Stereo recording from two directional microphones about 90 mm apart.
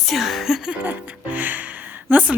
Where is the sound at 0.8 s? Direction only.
20° right (ahead or behind).